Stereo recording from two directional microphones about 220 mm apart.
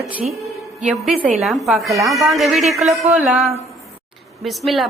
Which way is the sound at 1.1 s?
30° right (ahead or behind).